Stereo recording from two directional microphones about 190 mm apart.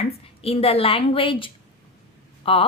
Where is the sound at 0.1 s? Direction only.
30° left (ahead or behind).